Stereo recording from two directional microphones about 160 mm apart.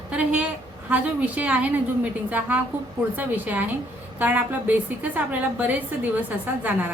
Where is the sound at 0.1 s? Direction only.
5° right (ahead or behind).